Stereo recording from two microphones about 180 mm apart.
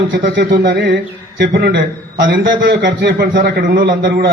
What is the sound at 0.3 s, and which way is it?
A man's voice, 70° right (ahead or behind).